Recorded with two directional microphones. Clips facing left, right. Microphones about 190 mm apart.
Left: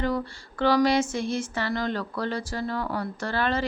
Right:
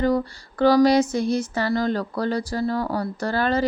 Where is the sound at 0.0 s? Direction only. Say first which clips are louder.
Right 6 dB; 40° right (ahead or behind).